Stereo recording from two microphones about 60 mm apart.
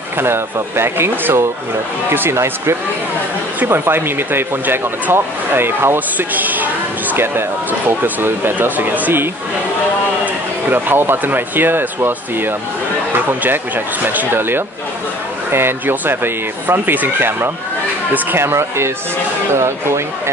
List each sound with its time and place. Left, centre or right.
0.2 s speech: right
2.3 s speech: right
10.7 s speech: right
14.0 s speech: right